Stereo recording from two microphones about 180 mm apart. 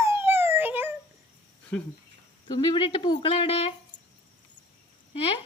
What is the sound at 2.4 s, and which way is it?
Speech, 25° left (ahead or behind).